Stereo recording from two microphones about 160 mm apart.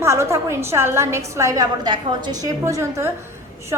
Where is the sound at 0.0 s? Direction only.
15° right (ahead or behind).